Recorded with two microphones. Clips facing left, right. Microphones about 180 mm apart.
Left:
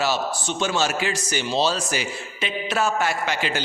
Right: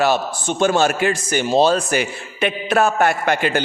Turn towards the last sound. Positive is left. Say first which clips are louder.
# right 6 dB
turn(degrees=-55)  # may be behind; listen again after turning